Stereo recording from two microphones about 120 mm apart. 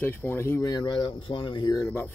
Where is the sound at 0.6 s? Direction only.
35° left (ahead or behind).